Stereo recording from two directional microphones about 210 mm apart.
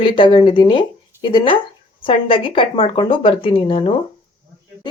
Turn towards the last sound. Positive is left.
turn(degrees=25)  # may be behind; listen again after turning